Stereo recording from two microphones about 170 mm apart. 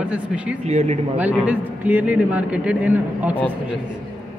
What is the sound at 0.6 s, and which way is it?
Speech, 40° right (ahead or behind).